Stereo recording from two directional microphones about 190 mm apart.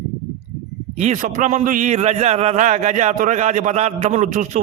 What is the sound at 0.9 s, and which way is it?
A man's voice, 35° right (ahead or behind).